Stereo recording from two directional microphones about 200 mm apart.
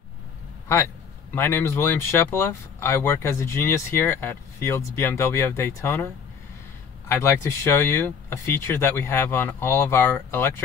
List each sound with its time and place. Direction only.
1.3 s speech: 10° left (ahead or behind)
7.1 s speech: 15° left (ahead or behind)